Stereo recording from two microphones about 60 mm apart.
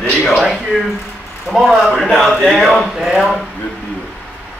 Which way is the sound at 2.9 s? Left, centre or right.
Centre.